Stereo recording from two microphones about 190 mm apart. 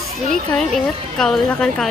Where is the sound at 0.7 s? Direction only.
Centre (ahead or behind).